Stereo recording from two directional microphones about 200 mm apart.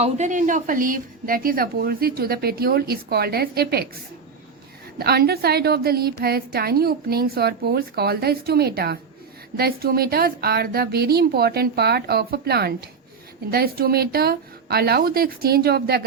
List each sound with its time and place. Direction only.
0.0 s a woman's voice: 35° right (ahead or behind)
4.9 s a woman's voice: 50° right (ahead or behind)